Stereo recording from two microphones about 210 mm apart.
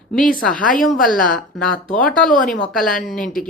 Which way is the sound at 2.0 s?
40° left (ahead or behind).